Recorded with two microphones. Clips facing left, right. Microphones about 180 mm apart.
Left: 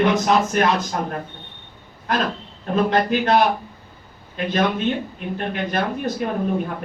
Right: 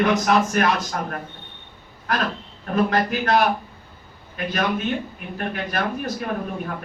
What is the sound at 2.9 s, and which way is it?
Speech, 25° left (ahead or behind).